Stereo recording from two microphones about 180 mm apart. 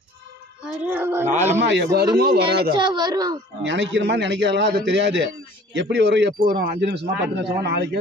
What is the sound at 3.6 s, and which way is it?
A man's voice, 80° right.